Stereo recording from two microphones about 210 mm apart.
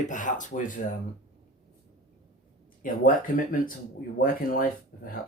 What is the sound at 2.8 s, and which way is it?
Speech, 40° left (ahead or behind).